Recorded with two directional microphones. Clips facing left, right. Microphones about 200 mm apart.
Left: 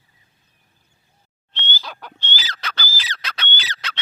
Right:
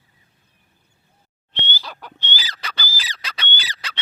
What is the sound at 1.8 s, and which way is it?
Frog, 5° right (ahead or behind).